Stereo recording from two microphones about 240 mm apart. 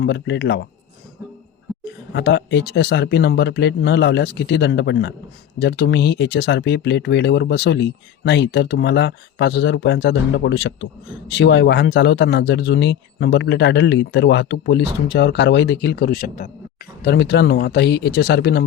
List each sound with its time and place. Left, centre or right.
0.0 s speech: left
2.1 s speech: left